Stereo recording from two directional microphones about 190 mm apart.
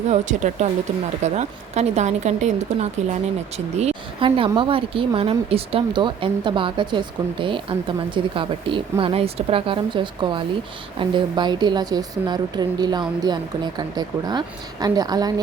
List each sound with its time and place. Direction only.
0.1 s a woman's voice: 40° right (ahead or behind); by 15.3 s 20° right (ahead or behind)